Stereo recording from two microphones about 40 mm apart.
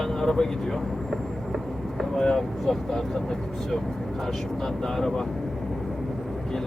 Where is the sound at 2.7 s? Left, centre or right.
Centre.